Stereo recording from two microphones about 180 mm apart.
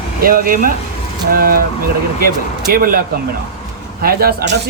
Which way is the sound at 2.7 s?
50° right (ahead or behind).